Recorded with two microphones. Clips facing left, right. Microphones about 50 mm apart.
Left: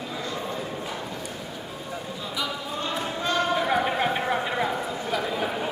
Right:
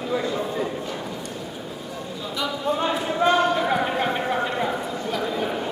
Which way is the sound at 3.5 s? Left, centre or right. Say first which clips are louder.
Right 1 dB; centre.